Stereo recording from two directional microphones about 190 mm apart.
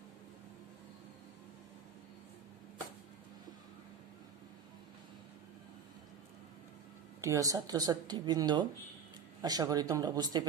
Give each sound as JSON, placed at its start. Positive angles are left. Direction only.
{"t": 7.2, "sound": "speech", "side_deg": -15}